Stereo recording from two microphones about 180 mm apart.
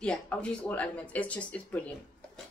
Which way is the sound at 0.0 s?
5° left (ahead or behind).